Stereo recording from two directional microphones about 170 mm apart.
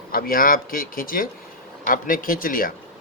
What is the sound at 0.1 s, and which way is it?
Speech, 60° left (ahead or behind).